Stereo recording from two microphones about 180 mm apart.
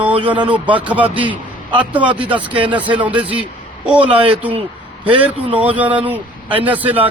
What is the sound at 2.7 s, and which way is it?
Speech, 10° right (ahead or behind).